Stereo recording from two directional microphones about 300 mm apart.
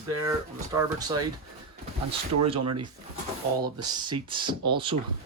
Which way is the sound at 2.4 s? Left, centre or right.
Centre.